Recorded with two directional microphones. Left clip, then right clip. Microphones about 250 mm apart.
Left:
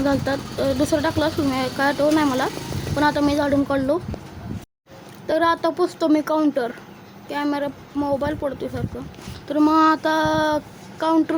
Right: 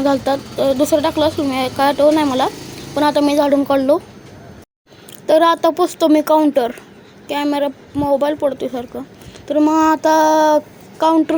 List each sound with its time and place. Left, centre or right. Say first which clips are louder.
0.0 s speech: right 6 dB; centre
5.2 s speech: right 7 dB; centre